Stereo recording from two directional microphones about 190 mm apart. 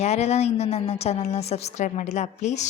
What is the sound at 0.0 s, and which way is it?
Speech, 35° left (ahead or behind).